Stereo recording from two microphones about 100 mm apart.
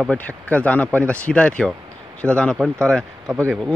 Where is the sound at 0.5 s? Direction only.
15° left (ahead or behind).